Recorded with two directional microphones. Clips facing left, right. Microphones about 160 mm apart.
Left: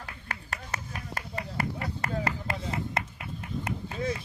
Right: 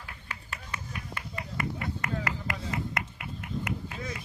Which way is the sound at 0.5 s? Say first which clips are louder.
Left 1 dB; 40° left (ahead or behind).